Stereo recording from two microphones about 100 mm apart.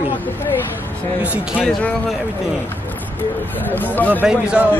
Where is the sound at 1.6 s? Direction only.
10° left (ahead or behind).